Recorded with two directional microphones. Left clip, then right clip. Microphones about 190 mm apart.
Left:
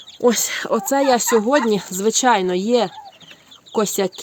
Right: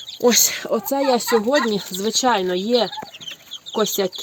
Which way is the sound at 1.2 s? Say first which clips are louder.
Left 1 dB; 20° left (ahead or behind).